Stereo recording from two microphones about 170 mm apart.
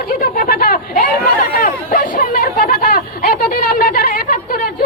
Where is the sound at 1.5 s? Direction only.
60° left (ahead or behind).